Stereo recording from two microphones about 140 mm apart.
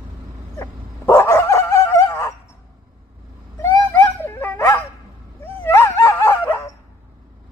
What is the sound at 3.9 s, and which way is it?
Dog, 15° left (ahead or behind).